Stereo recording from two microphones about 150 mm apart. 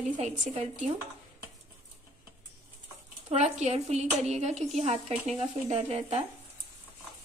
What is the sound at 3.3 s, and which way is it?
A woman's voice, 50° right (ahead or behind).